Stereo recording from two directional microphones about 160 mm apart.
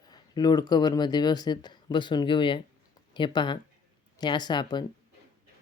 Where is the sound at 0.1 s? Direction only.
25° left (ahead or behind).